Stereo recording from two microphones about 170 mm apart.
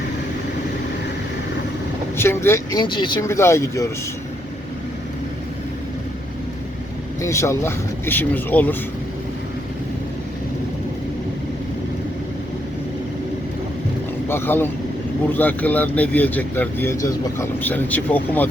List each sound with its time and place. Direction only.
2.1 s speech: 15° left (ahead or behind)
2.7 s speech: 25° left (ahead or behind)
3.2 s speech: 15° left (ahead or behind)
7.2 s speech: 15° left (ahead or behind)
14.3 s speech: 15° left (ahead or behind)